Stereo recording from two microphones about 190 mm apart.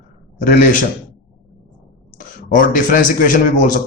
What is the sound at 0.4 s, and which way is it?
Speech, 50° left (ahead or behind).